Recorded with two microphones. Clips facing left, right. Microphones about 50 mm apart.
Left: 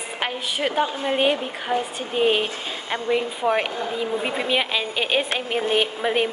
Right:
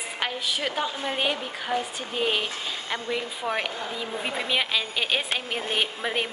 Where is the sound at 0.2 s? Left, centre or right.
Left.